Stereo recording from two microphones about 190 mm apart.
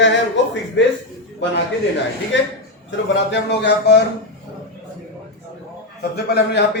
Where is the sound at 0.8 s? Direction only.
70° left (ahead or behind).